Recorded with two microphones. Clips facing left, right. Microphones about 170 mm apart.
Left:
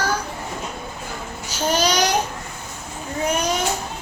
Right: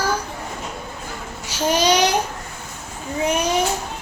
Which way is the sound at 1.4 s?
10° right (ahead or behind).